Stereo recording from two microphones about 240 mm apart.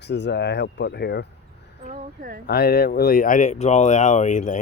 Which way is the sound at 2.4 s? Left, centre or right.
Left.